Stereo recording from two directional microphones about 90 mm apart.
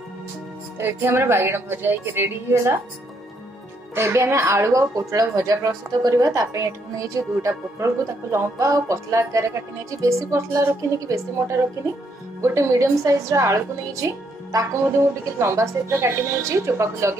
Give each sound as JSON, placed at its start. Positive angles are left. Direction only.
{"t": 0.7, "sound": "speech", "side_deg": -25}
{"t": 3.9, "sound": "a woman's voice", "side_deg": -25}